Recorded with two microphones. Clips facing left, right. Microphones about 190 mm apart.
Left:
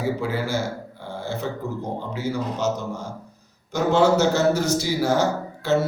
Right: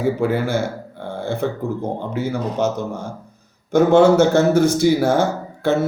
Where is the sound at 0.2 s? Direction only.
55° right (ahead or behind).